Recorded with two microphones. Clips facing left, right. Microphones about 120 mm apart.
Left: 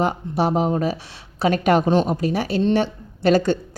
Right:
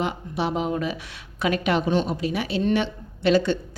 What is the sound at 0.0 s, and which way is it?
A woman's voice, 40° left (ahead or behind).